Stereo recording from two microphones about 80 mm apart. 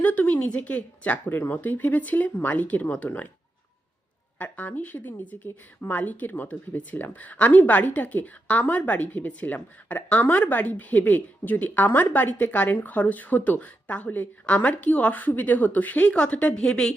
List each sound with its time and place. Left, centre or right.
0.0 s a woman's voice: centre
4.4 s a woman's voice: centre